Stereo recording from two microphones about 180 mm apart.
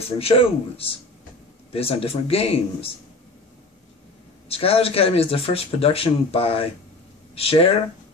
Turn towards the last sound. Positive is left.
turn(degrees=35)  # may be behind; listen again after turning